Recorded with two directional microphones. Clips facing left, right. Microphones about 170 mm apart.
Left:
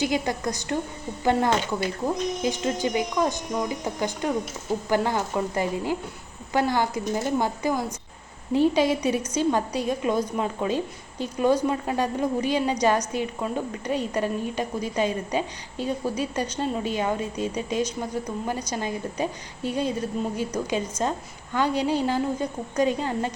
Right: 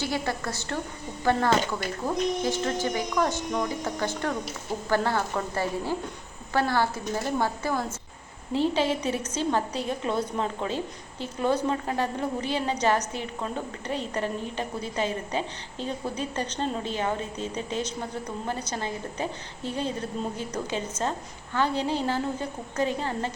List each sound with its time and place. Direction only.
0.0 s a woman's voice: 15° left (ahead or behind)